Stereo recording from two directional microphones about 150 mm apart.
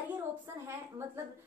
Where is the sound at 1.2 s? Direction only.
15° right (ahead or behind).